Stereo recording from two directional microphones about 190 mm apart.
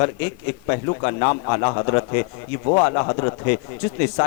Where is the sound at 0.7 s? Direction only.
25° left (ahead or behind).